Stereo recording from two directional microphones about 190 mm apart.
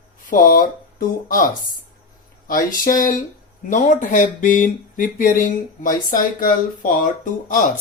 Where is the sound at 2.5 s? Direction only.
45° left (ahead or behind).